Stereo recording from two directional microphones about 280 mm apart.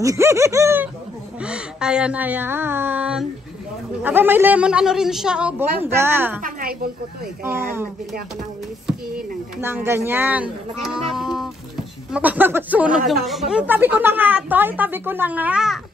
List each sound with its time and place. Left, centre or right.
0.0 s a woman's voice: centre
6.4 s a woman's voice: right
7.4 s a woman's voice: centre
9.6 s speech: centre